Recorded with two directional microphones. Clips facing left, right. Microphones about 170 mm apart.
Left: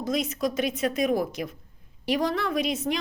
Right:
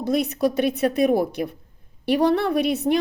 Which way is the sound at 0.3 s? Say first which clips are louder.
Right 6 dB; 65° right (ahead or behind).